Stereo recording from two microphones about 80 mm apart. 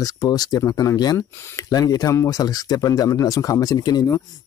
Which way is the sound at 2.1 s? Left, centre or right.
Left.